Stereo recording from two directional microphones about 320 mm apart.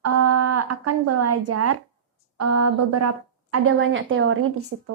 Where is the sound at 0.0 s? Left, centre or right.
Right.